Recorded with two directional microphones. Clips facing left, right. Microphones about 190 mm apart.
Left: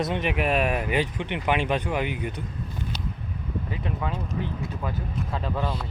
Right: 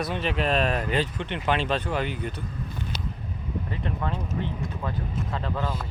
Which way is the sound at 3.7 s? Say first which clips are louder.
Even; 5° left (ahead or behind).